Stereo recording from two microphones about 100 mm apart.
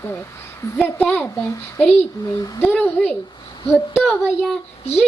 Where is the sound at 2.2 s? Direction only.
40° left (ahead or behind).